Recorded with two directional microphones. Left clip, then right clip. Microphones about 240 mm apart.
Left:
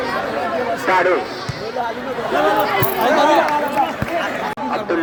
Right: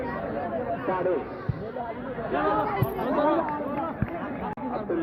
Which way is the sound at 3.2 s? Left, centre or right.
Left.